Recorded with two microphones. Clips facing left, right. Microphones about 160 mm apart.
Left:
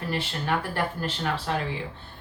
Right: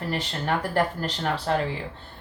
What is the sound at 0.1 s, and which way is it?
Speech, 40° right (ahead or behind).